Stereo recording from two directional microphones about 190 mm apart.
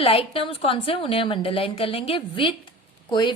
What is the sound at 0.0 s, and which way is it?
A woman's voice, 30° left (ahead or behind).